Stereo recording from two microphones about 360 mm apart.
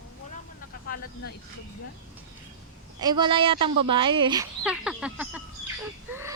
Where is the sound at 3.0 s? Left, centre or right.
Centre.